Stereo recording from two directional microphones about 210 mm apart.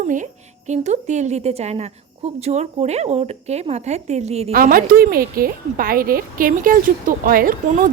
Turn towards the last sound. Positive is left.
turn(degrees=-40)  # may be behind; listen again after turning